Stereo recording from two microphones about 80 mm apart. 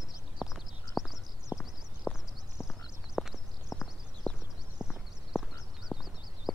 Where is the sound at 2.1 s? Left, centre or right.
Centre.